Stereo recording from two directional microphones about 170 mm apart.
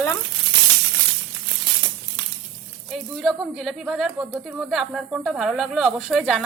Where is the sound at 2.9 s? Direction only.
Centre (ahead or behind).